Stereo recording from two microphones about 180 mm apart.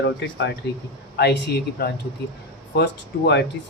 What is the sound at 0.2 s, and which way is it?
Speech, 75° left (ahead or behind).